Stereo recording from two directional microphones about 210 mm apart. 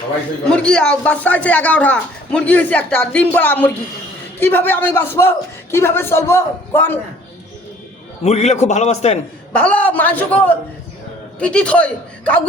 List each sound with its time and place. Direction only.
0.4 s speech: 5° left (ahead or behind)
8.2 s a man's voice: 30° left (ahead or behind)
9.5 s a man's voice: 5° left (ahead or behind)